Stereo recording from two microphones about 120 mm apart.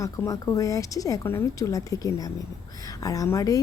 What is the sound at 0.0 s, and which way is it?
A woman's voice, 25° left (ahead or behind).